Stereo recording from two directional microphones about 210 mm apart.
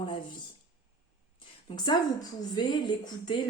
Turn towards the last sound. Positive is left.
turn(degrees=20)  # may be behind; listen again after turning